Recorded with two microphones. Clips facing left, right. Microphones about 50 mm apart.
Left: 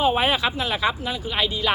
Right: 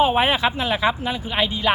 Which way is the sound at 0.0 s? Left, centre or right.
Centre.